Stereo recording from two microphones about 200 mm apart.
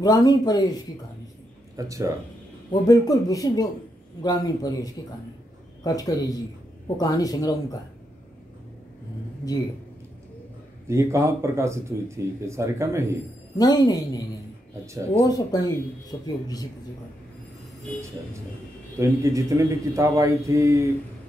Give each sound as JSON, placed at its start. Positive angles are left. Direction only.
{"t": 0.0, "sound": "speech", "side_deg": 20}
{"t": 1.8, "sound": "speech", "side_deg": -15}
{"t": 2.7, "sound": "a man's voice", "side_deg": 20}
{"t": 10.9, "sound": "speech", "side_deg": -15}
{"t": 13.6, "sound": "speech", "side_deg": 20}
{"t": 15.2, "sound": "speech", "side_deg": 20}
{"t": 18.9, "sound": "speech", "side_deg": -15}